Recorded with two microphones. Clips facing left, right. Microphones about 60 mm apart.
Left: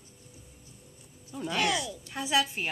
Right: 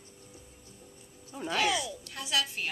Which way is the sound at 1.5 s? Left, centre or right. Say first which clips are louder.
Even; centre.